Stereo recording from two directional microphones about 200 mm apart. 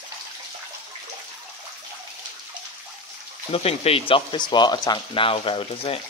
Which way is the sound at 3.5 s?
30° left (ahead or behind).